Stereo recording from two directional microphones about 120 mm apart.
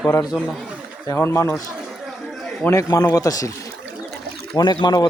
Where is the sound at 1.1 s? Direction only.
20° left (ahead or behind).